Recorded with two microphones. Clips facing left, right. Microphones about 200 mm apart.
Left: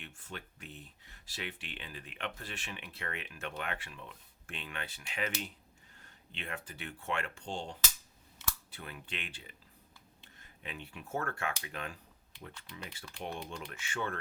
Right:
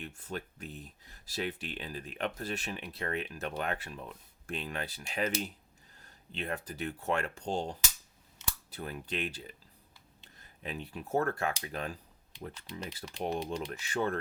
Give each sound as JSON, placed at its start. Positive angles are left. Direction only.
{"t": 0.0, "sound": "speech", "side_deg": -40}